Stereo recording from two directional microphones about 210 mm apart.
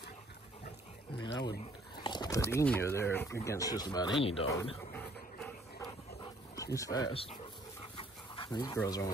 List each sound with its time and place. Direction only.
1.2 s speech: 20° left (ahead or behind)
4.9 s a sound: 5° left (ahead or behind)
6.5 s speech: 15° left (ahead or behind)
8.0 s dog: 20° left (ahead or behind)